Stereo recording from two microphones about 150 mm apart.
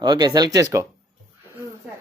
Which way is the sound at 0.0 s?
30° right (ahead or behind).